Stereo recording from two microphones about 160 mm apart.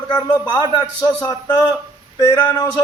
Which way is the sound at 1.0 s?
5° left (ahead or behind).